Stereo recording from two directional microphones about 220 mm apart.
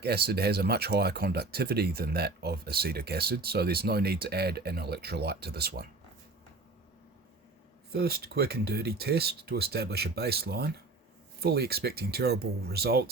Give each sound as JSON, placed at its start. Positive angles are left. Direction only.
{"t": 0.0, "sound": "speech", "side_deg": -45}
{"t": 7.9, "sound": "speech", "side_deg": -45}